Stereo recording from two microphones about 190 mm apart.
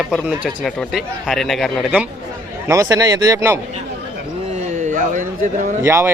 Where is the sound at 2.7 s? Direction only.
15° right (ahead or behind).